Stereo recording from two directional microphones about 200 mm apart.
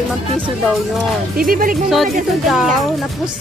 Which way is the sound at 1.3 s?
45° right (ahead or behind).